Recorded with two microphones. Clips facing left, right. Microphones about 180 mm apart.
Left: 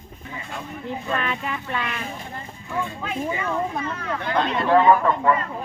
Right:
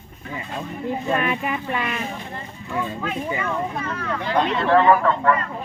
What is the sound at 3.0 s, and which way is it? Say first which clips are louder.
A woman's voice: right 1 dB; 10° left (ahead or behind).